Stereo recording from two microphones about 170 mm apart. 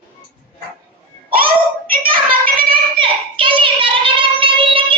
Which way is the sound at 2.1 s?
55° right (ahead or behind).